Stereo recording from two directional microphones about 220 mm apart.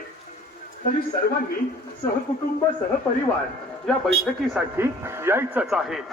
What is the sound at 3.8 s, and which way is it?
Speech, centre (ahead or behind).